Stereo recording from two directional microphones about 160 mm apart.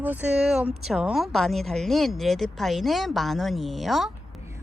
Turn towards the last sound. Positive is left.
turn(degrees=0)  # may be behind; listen again after turning